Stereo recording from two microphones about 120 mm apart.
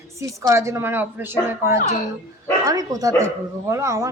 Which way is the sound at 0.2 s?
25° right (ahead or behind).